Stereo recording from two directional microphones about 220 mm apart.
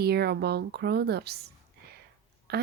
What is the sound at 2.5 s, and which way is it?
Speech, 45° right (ahead or behind).